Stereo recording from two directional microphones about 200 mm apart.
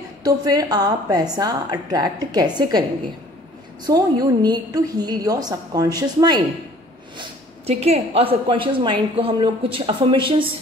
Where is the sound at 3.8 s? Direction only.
20° right (ahead or behind).